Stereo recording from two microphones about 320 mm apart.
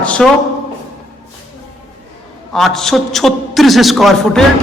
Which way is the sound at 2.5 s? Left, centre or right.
Centre.